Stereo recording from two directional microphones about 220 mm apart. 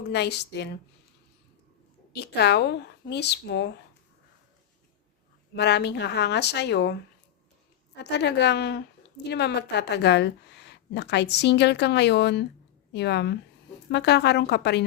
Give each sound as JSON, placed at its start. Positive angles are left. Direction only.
{"t": 0.1, "sound": "a woman's voice", "side_deg": 50}
{"t": 2.1, "sound": "a woman's voice", "side_deg": 50}
{"t": 5.5, "sound": "a woman's voice", "side_deg": 50}
{"t": 8.1, "sound": "a woman's voice", "side_deg": 50}